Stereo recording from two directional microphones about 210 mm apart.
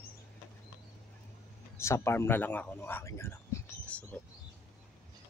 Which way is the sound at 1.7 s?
15° left (ahead or behind).